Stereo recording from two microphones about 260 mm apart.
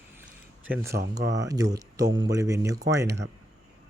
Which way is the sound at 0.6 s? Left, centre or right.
Centre.